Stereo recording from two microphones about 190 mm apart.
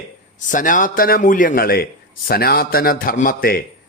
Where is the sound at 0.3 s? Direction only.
45° left (ahead or behind).